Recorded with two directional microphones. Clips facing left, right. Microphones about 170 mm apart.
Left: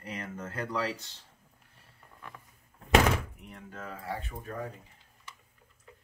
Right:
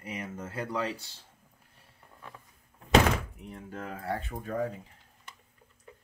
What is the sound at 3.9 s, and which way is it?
Speech, 50° right (ahead or behind).